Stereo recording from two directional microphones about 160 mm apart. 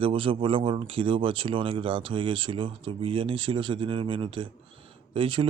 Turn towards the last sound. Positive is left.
turn(degrees=-30)  # may be behind; listen again after turning